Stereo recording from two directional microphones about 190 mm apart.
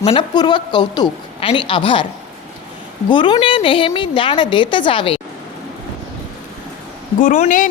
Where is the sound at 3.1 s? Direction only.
25° left (ahead or behind).